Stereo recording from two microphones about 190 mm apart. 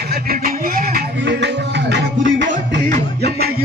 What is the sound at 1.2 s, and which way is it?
Music, 65° right (ahead or behind).